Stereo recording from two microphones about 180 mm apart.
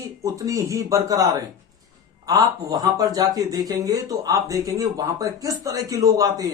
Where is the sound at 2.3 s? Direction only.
20° right (ahead or behind).